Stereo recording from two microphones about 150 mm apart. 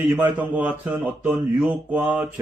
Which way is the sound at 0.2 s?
10° right (ahead or behind).